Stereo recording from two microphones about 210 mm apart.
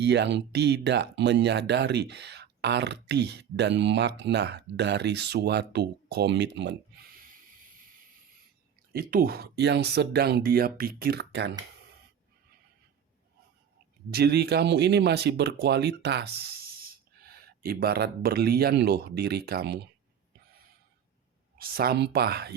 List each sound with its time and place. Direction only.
0.0 s speech: 55° right (ahead or behind)
8.9 s speech: 45° right (ahead or behind)
14.1 s speech: 50° right (ahead or behind)
21.6 s speech: 45° right (ahead or behind)